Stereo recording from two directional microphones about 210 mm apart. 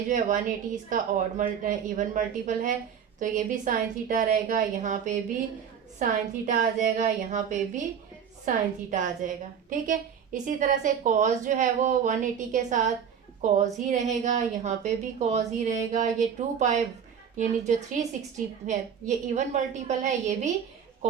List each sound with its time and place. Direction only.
0.1 s a woman's voice: 40° right (ahead or behind)